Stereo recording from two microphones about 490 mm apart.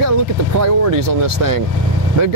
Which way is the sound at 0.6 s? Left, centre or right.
Right.